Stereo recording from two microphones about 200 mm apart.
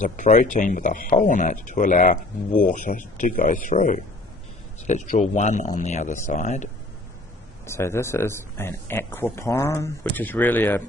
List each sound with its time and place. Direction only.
0.0 s speech: 40° left (ahead or behind)
7.6 s speech: 15° left (ahead or behind)